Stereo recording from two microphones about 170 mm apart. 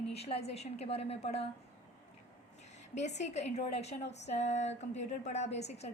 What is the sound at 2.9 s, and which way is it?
A woman's voice, 40° left (ahead or behind).